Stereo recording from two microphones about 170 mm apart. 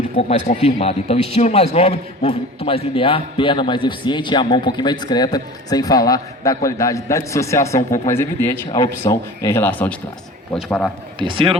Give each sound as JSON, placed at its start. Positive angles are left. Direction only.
{"t": 0.2, "sound": "a man's voice", "side_deg": 40}
{"t": 11.2, "sound": "speech", "side_deg": -30}